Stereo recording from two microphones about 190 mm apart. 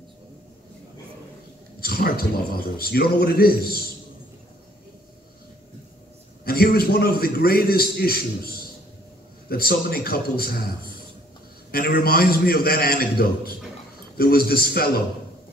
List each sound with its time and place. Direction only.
1.8 s a man's voice: 50° left (ahead or behind)
6.4 s a man's voice: 55° left (ahead or behind)
11.7 s a man's voice: 50° left (ahead or behind)